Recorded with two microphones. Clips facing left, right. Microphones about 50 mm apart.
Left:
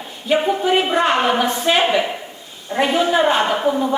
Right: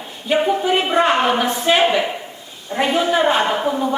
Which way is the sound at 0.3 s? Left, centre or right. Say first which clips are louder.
Even; centre.